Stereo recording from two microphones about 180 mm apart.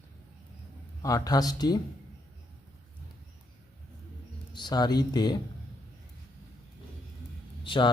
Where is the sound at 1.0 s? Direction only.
20° left (ahead or behind).